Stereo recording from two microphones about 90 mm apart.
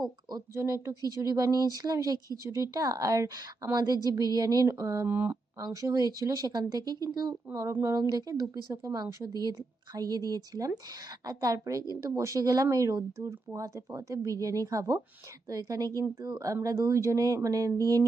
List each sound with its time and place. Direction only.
0.0 s a woman's voice: 50° right (ahead or behind)
0.5 s a woman's voice: 35° right (ahead or behind)
5.0 s speech: 20° right (ahead or behind)
5.5 s a woman's voice: 40° right (ahead or behind)